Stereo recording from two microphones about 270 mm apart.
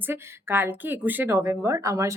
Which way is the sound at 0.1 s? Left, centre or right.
Centre.